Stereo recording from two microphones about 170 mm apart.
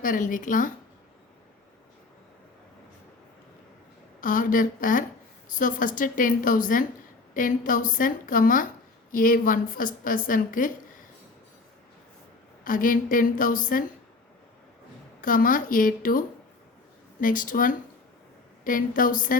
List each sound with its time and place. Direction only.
0.0 s a woman's voice: 50° left (ahead or behind)
4.2 s a woman's voice: 50° left (ahead or behind)
12.6 s a woman's voice: 55° left (ahead or behind)
15.2 s a woman's voice: 55° left (ahead or behind)